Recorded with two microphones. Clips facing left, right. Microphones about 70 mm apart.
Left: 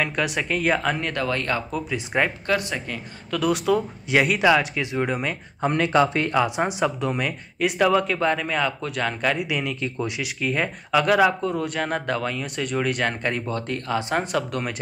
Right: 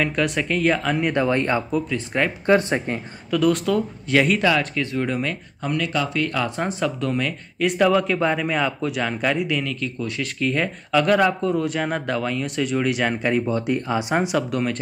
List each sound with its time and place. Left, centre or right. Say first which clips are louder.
0.0 s speech: right 2 dB; centre
1.0 s speech: right 5 dB; right
1.9 s speech: even; centre
2.4 s speech: right 6 dB; right
3.3 s speech: right 2 dB; centre
5.6 s speech: left 5 dB; left
6.4 s speech: left 1 dB; centre
7.6 s speech: right 2 dB; centre
9.5 s speech: right 1 dB; centre